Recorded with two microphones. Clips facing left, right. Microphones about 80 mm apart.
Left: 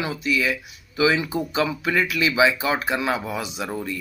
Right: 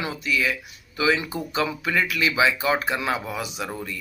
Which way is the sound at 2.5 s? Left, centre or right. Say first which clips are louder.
Even; left.